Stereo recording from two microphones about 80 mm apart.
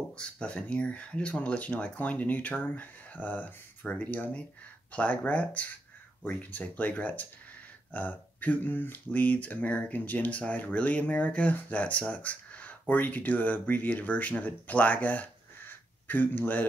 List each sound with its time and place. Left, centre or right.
0.1 s speech: centre